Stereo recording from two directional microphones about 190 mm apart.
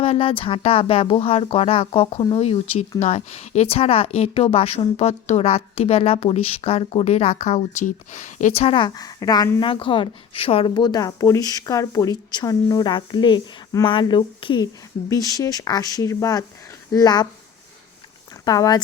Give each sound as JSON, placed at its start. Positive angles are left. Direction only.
{"t": 0.0, "sound": "speech", "side_deg": 30}
{"t": 18.4, "sound": "speech", "side_deg": 20}